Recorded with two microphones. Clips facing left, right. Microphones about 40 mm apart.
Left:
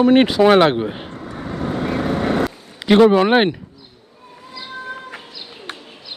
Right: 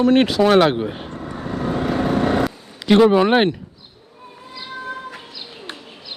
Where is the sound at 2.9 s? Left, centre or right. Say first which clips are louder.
Left 1 dB; centre.